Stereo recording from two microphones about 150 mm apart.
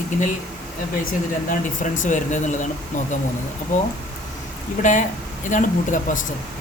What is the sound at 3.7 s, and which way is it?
Speech, 60° left (ahead or behind).